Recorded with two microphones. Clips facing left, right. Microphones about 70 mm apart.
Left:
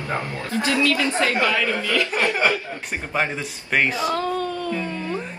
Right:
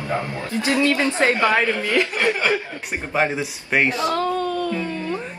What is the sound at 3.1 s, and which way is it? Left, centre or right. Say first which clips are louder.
Speech: right 4 dB; centre.